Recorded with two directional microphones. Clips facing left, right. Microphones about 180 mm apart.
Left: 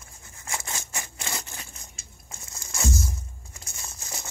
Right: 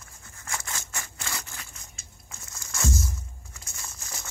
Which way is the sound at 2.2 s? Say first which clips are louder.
Left 2 dB; 25° left (ahead or behind).